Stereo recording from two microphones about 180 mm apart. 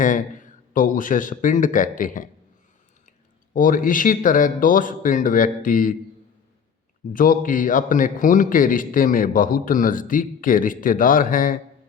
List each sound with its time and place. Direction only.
0.0 s a man's voice: 45° left (ahead or behind)
7.1 s a man's voice: 50° left (ahead or behind)